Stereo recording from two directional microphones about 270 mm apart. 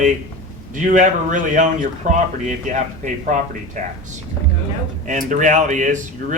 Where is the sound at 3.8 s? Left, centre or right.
Right.